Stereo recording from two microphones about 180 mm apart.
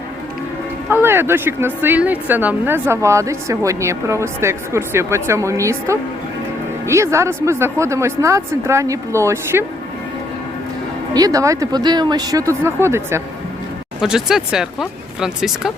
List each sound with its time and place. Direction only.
0.9 s speech: 10° right (ahead or behind)
11.1 s speech: 20° right (ahead or behind)
14.0 s speech: centre (ahead or behind)